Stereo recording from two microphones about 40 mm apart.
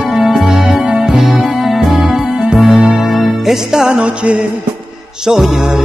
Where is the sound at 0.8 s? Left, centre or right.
Centre.